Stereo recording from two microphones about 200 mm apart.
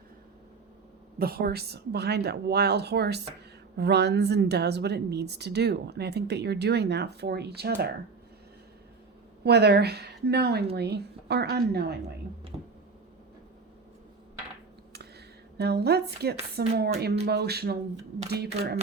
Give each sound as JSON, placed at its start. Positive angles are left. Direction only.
{"t": 1.2, "sound": "a woman's voice", "side_deg": -50}
{"t": 9.4, "sound": "a woman's voice", "side_deg": -55}
{"t": 12.5, "sound": "a sound", "side_deg": -20}
{"t": 15.5, "sound": "speech", "side_deg": -55}